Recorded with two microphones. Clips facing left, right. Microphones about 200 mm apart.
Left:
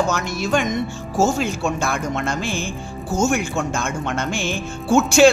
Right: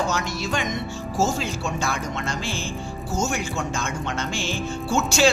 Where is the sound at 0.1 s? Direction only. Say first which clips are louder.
Left 5 dB; 50° left (ahead or behind).